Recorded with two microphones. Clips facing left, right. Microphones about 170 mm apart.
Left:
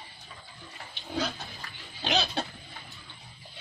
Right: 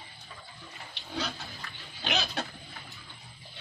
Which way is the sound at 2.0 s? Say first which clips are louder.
Left 3 dB; 35° left (ahead or behind).